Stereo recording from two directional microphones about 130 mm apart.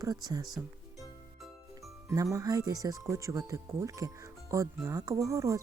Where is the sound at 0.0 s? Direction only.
30° right (ahead or behind).